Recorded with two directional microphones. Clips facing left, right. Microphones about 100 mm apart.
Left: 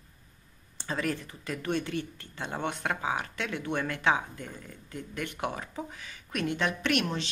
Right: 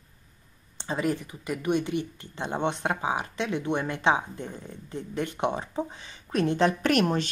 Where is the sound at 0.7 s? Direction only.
20° right (ahead or behind).